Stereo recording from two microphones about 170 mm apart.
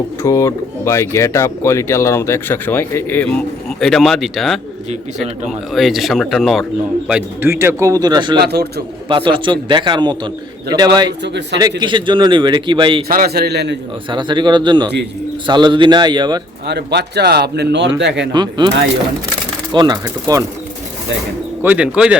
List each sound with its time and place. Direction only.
0.2 s speech: 15° left (ahead or behind); by 4.6 s centre (ahead or behind)
5.7 s speech: centre (ahead or behind); by 8.4 s 25° right (ahead or behind)
8.4 s a man's voice: 70° right (ahead or behind)
9.0 s speech: 30° right (ahead or behind)
13.1 s a man's voice: 60° right (ahead or behind)
14.1 s speech: 25° right (ahead or behind)
16.6 s speech: 80° right
18.3 s speech: 25° right (ahead or behind)
19.7 s speech: 25° right (ahead or behind)
21.6 s speech: 10° right (ahead or behind)